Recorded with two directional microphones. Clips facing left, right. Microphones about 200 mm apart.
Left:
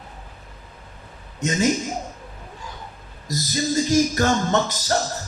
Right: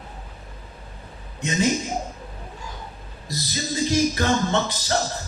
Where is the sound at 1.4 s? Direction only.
45° left (ahead or behind).